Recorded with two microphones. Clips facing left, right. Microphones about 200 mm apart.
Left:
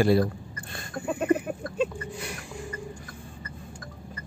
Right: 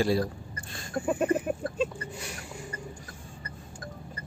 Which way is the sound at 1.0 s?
10° right (ahead or behind).